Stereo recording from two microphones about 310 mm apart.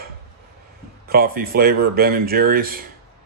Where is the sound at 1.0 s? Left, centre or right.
Right.